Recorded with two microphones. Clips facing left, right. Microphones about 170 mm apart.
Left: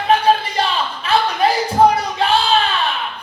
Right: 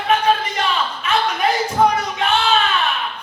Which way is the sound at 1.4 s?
35° left (ahead or behind).